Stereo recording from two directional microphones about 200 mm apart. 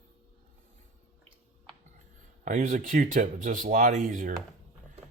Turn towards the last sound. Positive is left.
turn(degrees=-40)  # may be behind; listen again after turning